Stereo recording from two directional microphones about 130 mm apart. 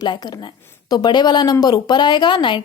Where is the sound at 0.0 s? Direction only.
30° left (ahead or behind).